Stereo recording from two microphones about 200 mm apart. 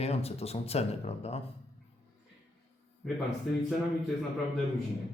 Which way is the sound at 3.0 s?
Centre (ahead or behind).